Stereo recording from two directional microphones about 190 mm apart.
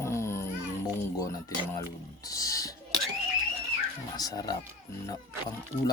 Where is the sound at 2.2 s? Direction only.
20° left (ahead or behind).